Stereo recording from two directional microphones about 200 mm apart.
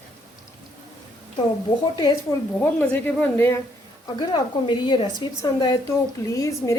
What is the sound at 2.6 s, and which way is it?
Speech, 10° left (ahead or behind).